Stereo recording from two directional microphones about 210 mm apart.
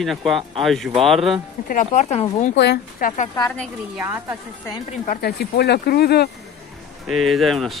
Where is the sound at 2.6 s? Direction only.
45° left (ahead or behind).